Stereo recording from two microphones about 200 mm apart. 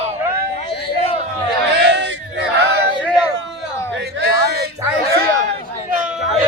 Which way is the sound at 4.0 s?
55° right (ahead or behind).